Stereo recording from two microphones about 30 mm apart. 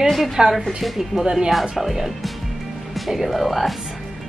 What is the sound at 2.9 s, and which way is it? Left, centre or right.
Speech, centre.